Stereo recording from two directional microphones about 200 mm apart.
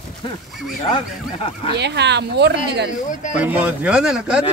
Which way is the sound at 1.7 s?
60° right (ahead or behind).